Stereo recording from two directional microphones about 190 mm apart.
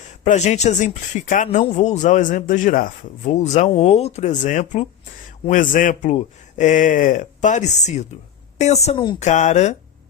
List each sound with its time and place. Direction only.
0.3 s speech: 35° left (ahead or behind)